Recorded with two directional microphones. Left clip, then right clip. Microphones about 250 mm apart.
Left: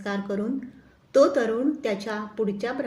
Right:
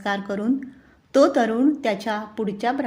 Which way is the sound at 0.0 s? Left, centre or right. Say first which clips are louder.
Right 4 dB; right.